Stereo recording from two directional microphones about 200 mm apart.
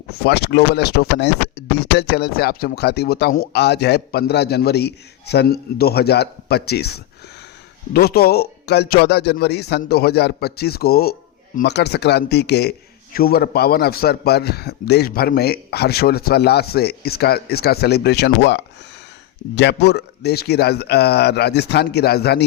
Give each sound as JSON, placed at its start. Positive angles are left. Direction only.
{"t": 0.1, "sound": "speech", "side_deg": 55}